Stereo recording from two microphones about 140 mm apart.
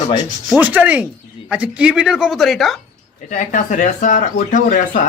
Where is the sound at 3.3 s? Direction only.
65° left (ahead or behind).